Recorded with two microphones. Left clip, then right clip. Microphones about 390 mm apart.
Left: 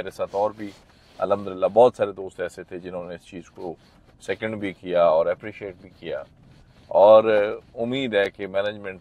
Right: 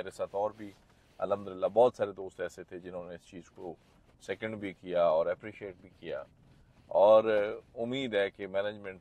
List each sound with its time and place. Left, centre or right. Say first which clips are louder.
0.0 s speech: left 9 dB; left